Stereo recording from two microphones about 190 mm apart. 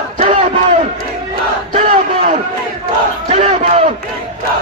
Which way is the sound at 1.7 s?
40° right (ahead or behind).